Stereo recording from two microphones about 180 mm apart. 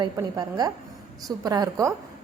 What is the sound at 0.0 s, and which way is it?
A woman's voice, 20° right (ahead or behind).